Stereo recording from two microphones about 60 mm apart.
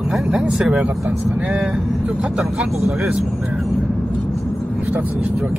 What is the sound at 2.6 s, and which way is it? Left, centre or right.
Speech, centre.